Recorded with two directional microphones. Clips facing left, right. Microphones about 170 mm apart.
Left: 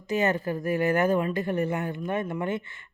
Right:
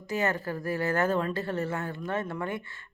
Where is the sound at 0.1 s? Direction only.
20° left (ahead or behind).